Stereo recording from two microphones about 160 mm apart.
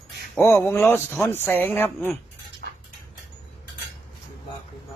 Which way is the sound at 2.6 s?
90° right.